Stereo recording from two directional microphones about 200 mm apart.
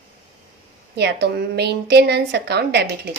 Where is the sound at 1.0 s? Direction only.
55° right (ahead or behind).